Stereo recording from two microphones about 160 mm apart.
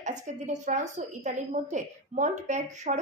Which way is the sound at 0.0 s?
50° right (ahead or behind).